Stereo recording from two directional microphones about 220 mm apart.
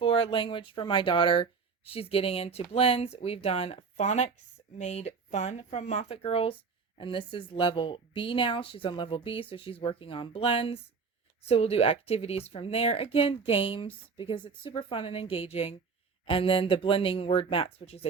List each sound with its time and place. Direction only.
0.0 s speech: 25° left (ahead or behind)